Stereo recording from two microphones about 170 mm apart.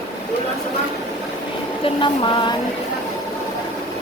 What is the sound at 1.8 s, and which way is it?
Speech, 30° left (ahead or behind).